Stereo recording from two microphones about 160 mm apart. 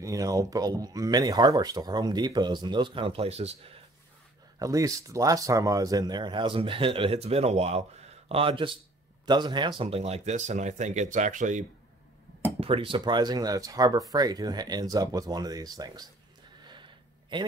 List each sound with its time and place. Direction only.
0.0 s speech: 20° right (ahead or behind); by 3.7 s 40° right (ahead or behind)
4.6 s speech: 20° right (ahead or behind); by 11.6 s 50° right (ahead or behind)
12.5 s speech: 35° right (ahead or behind)
16.6 s a sound: 30° right (ahead or behind)